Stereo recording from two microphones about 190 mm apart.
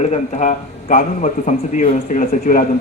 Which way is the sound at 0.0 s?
35° left (ahead or behind).